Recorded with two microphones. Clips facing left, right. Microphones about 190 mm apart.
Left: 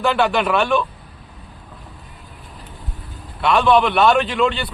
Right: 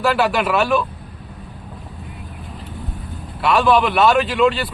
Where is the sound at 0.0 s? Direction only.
5° right (ahead or behind).